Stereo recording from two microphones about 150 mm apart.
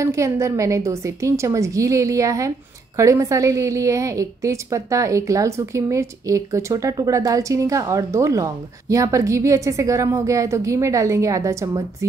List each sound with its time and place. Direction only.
0.0 s a woman's voice: 20° right (ahead or behind)